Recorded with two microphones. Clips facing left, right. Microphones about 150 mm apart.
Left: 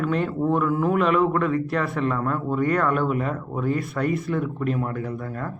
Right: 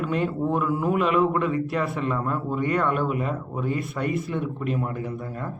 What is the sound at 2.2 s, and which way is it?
Speech, 20° right (ahead or behind).